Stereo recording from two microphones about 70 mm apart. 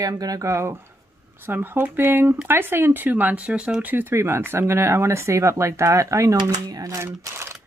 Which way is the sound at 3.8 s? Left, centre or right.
Right.